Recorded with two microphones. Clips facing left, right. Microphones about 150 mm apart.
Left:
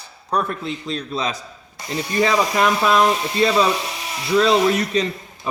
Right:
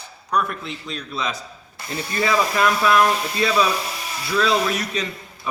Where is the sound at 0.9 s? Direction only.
35° left (ahead or behind).